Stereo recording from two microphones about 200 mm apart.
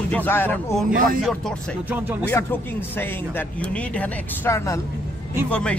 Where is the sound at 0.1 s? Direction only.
10° left (ahead or behind).